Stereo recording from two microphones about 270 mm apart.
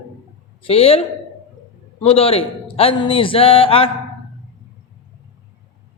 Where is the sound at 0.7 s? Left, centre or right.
Left.